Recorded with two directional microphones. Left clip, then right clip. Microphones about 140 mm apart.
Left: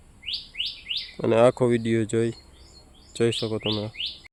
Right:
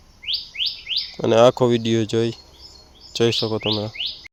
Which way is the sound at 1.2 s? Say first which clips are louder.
Right 5 dB; 10° right (ahead or behind).